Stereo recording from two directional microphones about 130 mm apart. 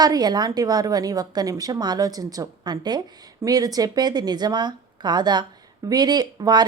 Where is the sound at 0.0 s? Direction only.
30° right (ahead or behind).